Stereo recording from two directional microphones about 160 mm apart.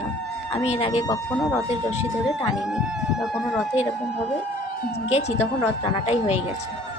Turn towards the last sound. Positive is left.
turn(degrees=40)  # may be behind; listen again after turning